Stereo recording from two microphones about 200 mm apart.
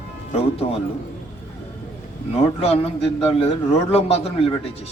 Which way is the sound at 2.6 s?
30° left (ahead or behind).